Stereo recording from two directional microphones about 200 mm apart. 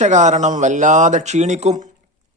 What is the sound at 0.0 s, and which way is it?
Speech, 35° right (ahead or behind).